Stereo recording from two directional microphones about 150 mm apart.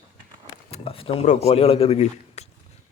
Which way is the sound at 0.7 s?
40° left (ahead or behind).